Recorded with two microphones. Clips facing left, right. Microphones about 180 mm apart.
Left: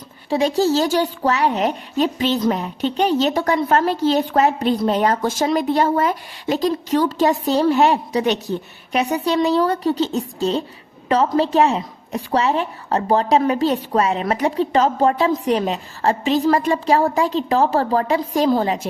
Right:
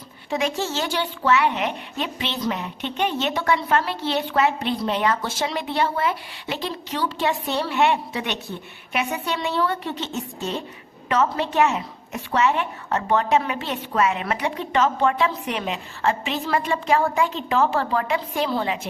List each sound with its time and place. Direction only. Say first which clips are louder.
0.3 s a woman's voice: left 8 dB; 35° left (ahead or behind)